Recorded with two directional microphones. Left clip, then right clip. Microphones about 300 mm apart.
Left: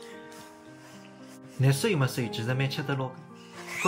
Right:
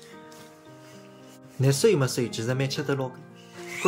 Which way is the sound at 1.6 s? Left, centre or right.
Centre.